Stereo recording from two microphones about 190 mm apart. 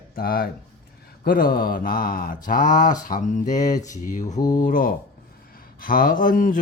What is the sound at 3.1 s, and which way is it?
Mantra, 40° left (ahead or behind).